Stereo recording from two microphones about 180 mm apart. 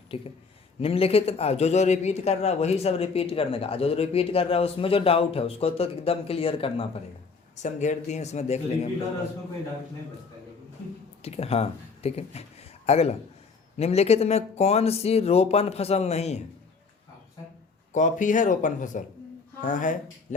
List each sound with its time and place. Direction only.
0.1 s a man's voice: 30° left (ahead or behind)
11.2 s a man's voice: 35° left (ahead or behind)
17.9 s speech: 45° left (ahead or behind)